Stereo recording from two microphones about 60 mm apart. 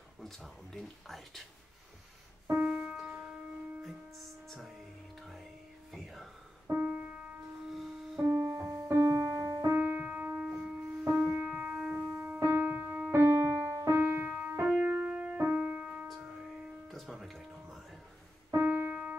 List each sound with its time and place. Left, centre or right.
0.2 s speech: centre
2.5 s music: right
4.5 s speech: centre
5.2 s music: centre
6.7 s music: right
7.7 s music: centre
8.3 s music: right
9.7 s music: right
10.5 s music: centre
11.2 s music: right
11.7 s music: right
12.2 s music: right
16.3 s music: centre
18.5 s keyboard: right